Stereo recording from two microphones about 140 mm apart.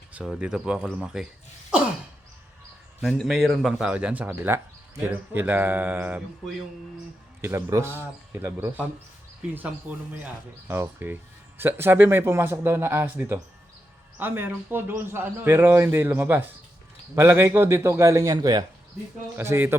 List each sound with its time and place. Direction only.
0.1 s a man's voice: 10° right (ahead or behind)
3.0 s a man's voice: centre (ahead or behind)
7.4 s a man's voice: 20° right (ahead or behind)
9.9 s a man's voice: 15° right (ahead or behind)
19.4 s speech: 15° right (ahead or behind)